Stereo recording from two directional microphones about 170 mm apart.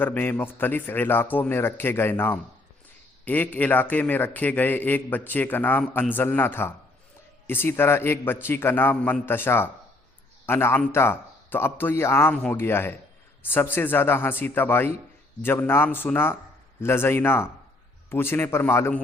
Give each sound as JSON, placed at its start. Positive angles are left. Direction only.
{"t": 0.0, "sound": "a man's voice", "side_deg": 10}